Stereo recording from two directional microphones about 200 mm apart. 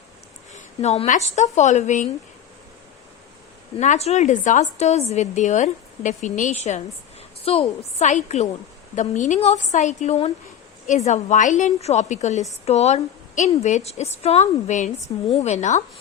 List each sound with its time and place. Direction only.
0.5 s a woman's voice: 35° left (ahead or behind)
3.8 s a woman's voice: 35° left (ahead or behind)